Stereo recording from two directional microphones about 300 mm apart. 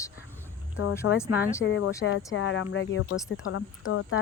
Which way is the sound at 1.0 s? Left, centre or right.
Left.